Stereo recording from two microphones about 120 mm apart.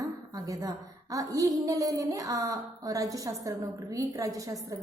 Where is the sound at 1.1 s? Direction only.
30° right (ahead or behind).